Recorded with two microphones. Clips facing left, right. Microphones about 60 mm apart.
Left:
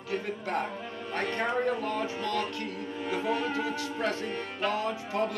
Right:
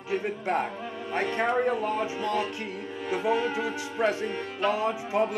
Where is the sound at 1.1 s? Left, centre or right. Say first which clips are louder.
Right 4 dB; centre.